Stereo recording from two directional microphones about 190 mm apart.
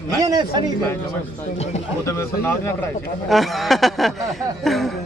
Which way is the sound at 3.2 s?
Centre (ahead or behind).